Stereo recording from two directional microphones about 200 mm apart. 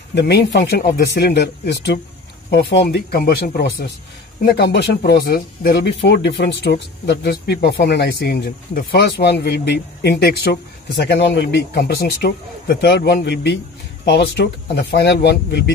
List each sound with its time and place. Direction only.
0.1 s speech: 60° left (ahead or behind)